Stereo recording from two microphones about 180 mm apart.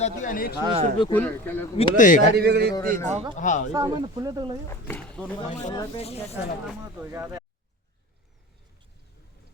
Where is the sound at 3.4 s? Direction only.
45° left (ahead or behind).